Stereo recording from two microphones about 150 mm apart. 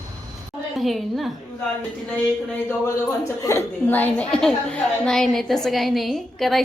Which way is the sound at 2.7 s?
15° left (ahead or behind).